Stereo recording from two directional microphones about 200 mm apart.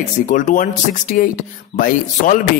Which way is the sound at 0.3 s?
40° left (ahead or behind).